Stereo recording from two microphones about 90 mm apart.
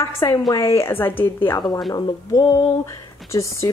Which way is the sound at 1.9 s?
50° left (ahead or behind).